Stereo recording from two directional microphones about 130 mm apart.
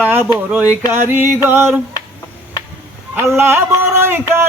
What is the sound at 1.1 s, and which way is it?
Music, 15° right (ahead or behind).